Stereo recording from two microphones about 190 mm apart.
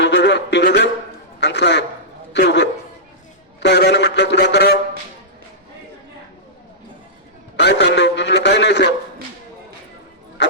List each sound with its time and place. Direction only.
0.0 s a man's voice: 65° left (ahead or behind)
7.5 s a man's voice: 65° left (ahead or behind)